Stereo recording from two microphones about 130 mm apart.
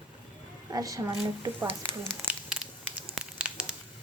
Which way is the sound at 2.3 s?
5° right (ahead or behind).